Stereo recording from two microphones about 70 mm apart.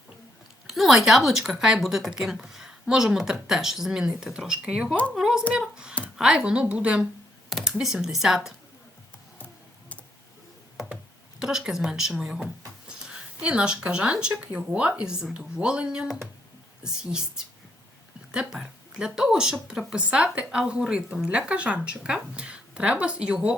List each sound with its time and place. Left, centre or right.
0.7 s speech: centre
11.3 s speech: centre
13.4 s speech: centre